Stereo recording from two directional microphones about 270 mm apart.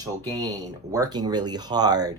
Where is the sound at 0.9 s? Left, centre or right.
Centre.